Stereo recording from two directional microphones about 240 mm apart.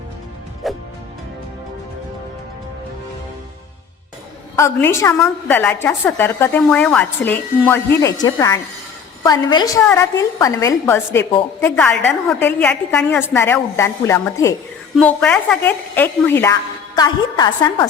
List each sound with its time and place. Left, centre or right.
0.6 s music: centre
4.5 s a woman's voice: centre